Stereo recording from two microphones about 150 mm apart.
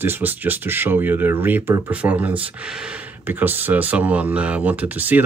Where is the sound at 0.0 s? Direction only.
15° right (ahead or behind).